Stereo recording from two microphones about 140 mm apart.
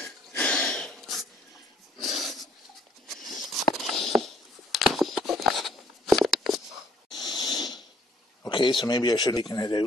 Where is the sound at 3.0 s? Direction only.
Centre (ahead or behind).